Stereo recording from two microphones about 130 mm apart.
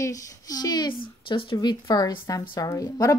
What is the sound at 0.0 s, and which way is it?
Speech, 25° left (ahead or behind).